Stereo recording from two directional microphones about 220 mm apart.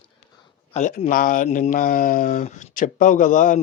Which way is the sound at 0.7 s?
30° left (ahead or behind).